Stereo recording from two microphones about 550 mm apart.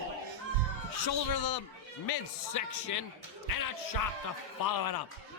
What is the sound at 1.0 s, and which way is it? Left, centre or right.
A man's voice, left.